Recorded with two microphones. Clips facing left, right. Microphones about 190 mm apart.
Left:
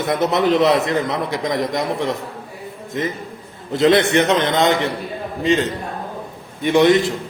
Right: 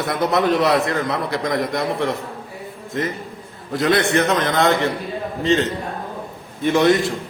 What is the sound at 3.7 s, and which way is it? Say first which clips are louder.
A man's voice: left 3 dB; 25° left (ahead or behind).